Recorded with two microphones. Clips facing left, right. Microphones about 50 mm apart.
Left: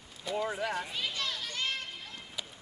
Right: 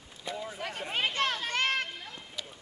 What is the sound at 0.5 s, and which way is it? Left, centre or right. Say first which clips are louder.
Speech: left 5 dB; left.